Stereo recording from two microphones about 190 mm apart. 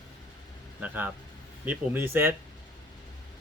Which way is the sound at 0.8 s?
10° right (ahead or behind).